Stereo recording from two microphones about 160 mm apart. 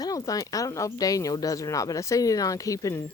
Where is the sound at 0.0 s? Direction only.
20° left (ahead or behind).